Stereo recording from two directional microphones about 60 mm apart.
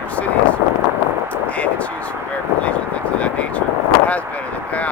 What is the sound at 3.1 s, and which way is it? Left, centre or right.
Speech, left.